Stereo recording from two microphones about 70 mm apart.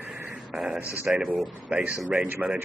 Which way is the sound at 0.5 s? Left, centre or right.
Centre.